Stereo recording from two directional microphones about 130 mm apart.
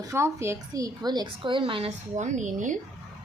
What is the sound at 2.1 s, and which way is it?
Speech, 65° right (ahead or behind).